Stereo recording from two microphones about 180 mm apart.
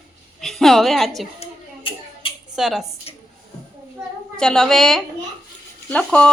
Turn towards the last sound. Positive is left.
turn(degrees=5)  # may be behind; listen again after turning